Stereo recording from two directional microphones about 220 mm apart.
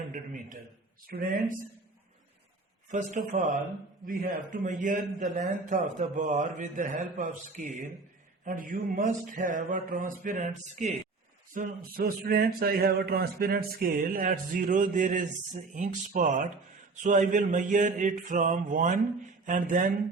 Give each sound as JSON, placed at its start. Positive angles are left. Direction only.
{"t": 0.1, "sound": "a sound", "side_deg": -35}
{"t": 1.0, "sound": "a man's voice", "side_deg": -40}
{"t": 2.9, "sound": "a man's voice", "side_deg": -35}